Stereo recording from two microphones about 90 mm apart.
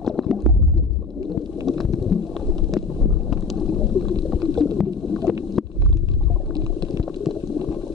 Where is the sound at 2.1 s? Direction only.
Centre (ahead or behind).